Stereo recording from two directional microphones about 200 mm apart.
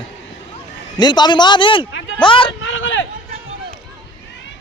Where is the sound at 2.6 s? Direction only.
70° left (ahead or behind).